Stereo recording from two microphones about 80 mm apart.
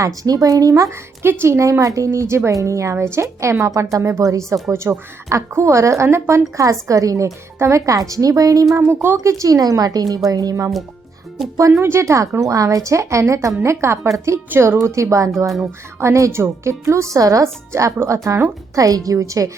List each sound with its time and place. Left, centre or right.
0.0 s speech: right
0.7 s a woman's voice: right
8.9 s speech: right
9.1 s speech: right
11.5 s a woman's voice: right